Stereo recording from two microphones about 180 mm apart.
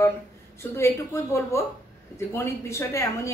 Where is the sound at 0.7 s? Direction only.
15° left (ahead or behind).